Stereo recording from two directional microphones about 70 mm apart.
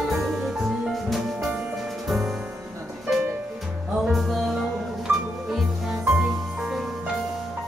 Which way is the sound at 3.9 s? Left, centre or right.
Centre.